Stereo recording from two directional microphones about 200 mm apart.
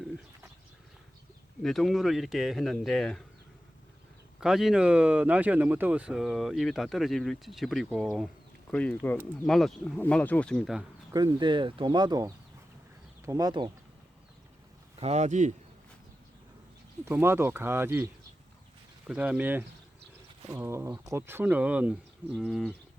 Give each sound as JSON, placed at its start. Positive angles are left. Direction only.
{"t": 1.6, "sound": "speech", "side_deg": 0}
{"t": 4.4, "sound": "speech", "side_deg": 0}
{"t": 11.1, "sound": "speech", "side_deg": -20}
{"t": 14.9, "sound": "speech", "side_deg": -35}
{"t": 17.1, "sound": "speech", "side_deg": -10}